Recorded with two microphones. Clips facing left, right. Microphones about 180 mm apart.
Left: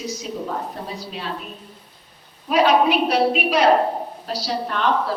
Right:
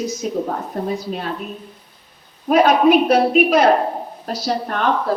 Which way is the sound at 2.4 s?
50° right (ahead or behind).